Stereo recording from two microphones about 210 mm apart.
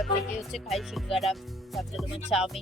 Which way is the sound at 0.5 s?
Centre (ahead or behind).